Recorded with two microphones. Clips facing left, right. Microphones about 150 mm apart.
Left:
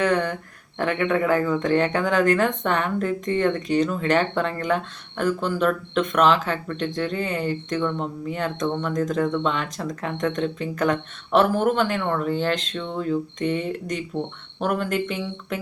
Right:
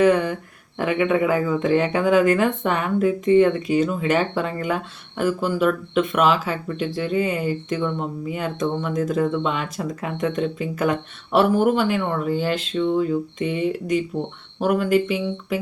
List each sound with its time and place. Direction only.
0.0 s speech: 10° right (ahead or behind)